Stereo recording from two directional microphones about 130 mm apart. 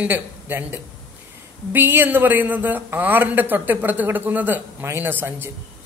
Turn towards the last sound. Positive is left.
turn(degrees=-15)  # may be behind; listen again after turning